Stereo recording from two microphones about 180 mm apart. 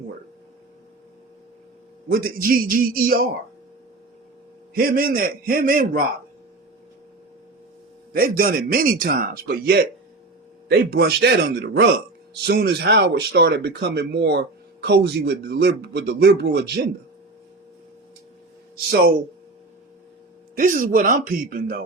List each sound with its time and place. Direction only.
2.0 s a man's voice: 55° right (ahead or behind)
4.7 s a man's voice: 55° right (ahead or behind)
8.1 s speech: 55° right (ahead or behind)
20.6 s a man's voice: 50° right (ahead or behind)